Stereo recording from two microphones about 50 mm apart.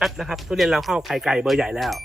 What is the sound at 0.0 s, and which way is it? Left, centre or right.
Speech, centre.